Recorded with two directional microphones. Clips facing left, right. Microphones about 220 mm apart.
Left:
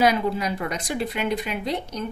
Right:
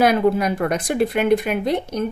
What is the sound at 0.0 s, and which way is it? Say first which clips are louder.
Speech: right 5 dB; 55° right (ahead or behind).